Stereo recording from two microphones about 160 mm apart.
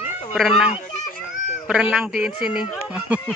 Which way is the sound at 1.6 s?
5° right (ahead or behind).